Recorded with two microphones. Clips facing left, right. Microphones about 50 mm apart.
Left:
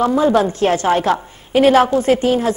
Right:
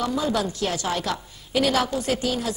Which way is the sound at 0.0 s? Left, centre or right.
Left.